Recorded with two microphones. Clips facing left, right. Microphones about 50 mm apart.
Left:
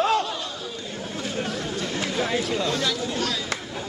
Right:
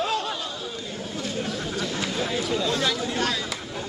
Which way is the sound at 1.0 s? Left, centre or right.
Centre.